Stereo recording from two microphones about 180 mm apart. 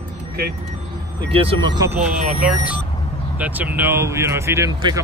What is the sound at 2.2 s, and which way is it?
Speech, 45° right (ahead or behind).